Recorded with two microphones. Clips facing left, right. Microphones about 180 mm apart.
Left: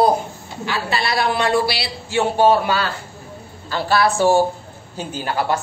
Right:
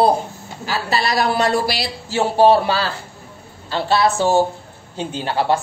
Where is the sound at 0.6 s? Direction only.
40° right (ahead or behind).